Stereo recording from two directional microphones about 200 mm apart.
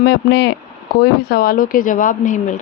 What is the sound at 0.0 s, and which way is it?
Speech, 55° left (ahead or behind).